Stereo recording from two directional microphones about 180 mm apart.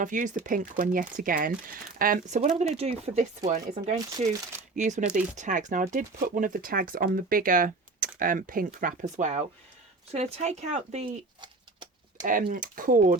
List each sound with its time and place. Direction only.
0.0 s speech: 45° right (ahead or behind)
2.6 s speech: 35° right (ahead or behind)
11.3 s a sound: 25° right (ahead or behind)
12.2 s speech: 50° right (ahead or behind)